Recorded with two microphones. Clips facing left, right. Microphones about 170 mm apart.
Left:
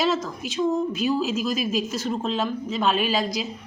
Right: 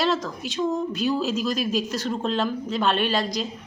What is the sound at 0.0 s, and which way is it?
A woman's voice, centre (ahead or behind).